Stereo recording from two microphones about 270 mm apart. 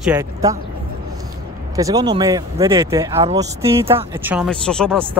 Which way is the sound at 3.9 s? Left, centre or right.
Right.